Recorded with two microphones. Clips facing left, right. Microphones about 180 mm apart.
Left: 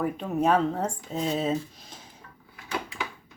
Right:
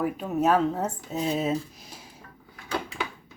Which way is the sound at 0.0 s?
5° right (ahead or behind).